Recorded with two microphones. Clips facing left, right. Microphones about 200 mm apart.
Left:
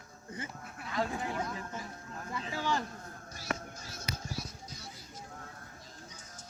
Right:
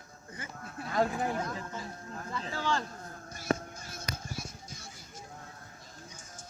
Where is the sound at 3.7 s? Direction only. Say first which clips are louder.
Right 1 dB; 50° right (ahead or behind).